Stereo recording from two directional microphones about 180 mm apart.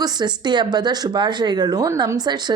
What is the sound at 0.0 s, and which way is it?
Speech, 20° right (ahead or behind).